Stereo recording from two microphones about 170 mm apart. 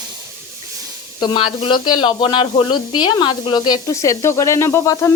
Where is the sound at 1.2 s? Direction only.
30° left (ahead or behind).